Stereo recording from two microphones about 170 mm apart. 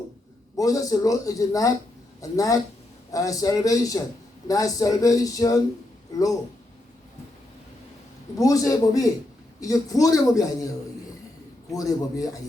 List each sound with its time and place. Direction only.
0.5 s speech: 20° left (ahead or behind)
8.4 s speech: 20° left (ahead or behind)
11.7 s speech: 20° left (ahead or behind)